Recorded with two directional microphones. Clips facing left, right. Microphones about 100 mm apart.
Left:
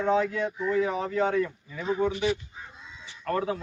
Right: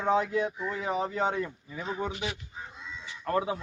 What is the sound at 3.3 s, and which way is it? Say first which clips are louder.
Speech: left 1 dB; 15° right (ahead or behind).